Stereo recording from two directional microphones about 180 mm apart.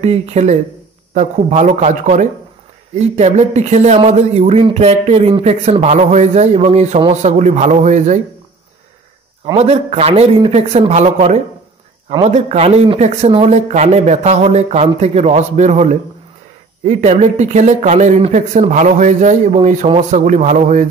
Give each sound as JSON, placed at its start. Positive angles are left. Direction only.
{"t": 0.0, "sound": "a man's voice", "side_deg": -35}
{"t": 9.5, "sound": "speech", "side_deg": -35}